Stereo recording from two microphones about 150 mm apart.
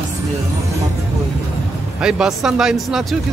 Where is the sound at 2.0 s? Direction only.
5° right (ahead or behind).